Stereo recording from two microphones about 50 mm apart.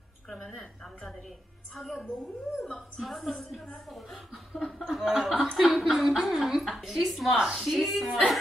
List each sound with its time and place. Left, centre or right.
0.5 s a woman's voice: centre
4.8 s a woman's voice: centre
7.3 s a woman's voice: centre
7.6 s a woman's voice: centre